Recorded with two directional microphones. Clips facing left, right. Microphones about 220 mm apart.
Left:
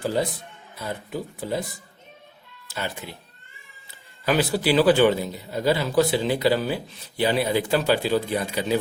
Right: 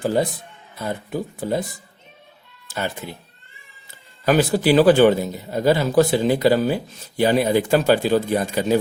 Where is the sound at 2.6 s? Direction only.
45° right (ahead or behind).